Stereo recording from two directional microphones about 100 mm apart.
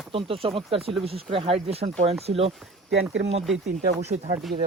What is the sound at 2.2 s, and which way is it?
Speech, 75° right (ahead or behind).